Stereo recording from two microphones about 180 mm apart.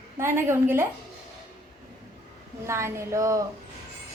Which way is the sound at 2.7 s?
15° right (ahead or behind).